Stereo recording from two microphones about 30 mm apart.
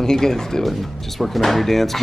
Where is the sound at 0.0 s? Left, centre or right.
Centre.